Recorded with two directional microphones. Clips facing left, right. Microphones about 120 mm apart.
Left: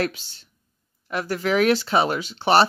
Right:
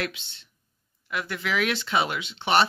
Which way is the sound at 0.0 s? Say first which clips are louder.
Left 6 dB; 40° left (ahead or behind).